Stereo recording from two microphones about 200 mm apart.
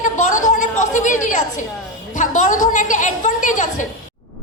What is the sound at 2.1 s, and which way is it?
A woman's voice, 40° left (ahead or behind).